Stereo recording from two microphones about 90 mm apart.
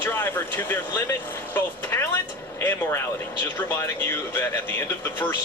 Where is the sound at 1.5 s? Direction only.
25° left (ahead or behind).